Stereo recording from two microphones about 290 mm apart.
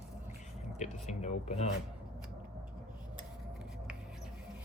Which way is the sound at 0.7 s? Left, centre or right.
Left.